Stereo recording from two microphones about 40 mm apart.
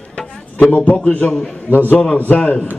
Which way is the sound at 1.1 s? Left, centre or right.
Left.